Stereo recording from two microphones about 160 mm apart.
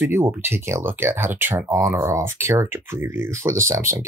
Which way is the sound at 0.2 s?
15° right (ahead or behind).